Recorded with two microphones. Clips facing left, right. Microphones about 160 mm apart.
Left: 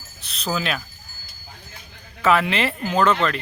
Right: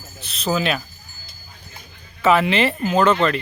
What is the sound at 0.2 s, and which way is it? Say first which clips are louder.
Cricket: right 4 dB; centre (ahead or behind).